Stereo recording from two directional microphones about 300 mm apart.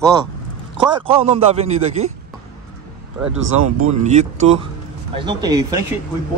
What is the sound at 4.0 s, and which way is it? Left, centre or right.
Speech, right.